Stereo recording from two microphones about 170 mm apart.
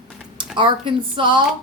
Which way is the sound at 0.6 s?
30° right (ahead or behind).